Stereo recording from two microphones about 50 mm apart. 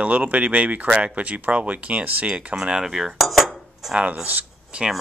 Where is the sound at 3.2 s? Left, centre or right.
Centre.